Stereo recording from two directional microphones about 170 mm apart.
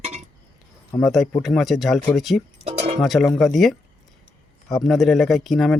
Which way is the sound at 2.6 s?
40° right (ahead or behind).